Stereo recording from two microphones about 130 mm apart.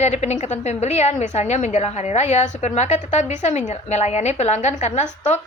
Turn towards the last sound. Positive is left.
turn(degrees=60)  # may be behind; listen again after turning